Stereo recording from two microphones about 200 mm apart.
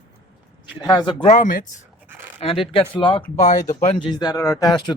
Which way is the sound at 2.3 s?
30° left (ahead or behind).